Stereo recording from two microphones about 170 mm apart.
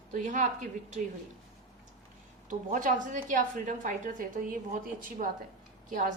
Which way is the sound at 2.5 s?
50° right (ahead or behind).